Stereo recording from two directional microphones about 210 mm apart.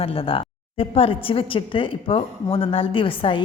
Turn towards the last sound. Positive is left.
turn(degrees=25)  # may be behind; listen again after turning